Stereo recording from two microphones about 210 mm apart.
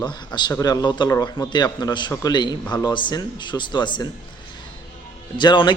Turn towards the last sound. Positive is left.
turn(degrees=20)  # may be behind; listen again after turning